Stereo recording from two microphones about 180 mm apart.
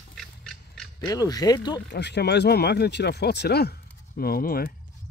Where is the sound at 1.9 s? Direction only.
70° left (ahead or behind); by 4.7 s 55° left (ahead or behind).